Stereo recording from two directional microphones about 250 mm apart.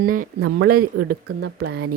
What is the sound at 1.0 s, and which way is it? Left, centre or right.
Speech, right.